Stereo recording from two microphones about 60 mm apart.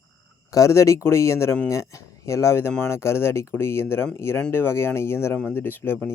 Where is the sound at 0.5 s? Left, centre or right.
Left.